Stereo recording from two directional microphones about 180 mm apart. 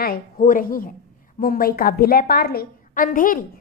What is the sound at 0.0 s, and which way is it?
A woman's voice, 55° left (ahead or behind).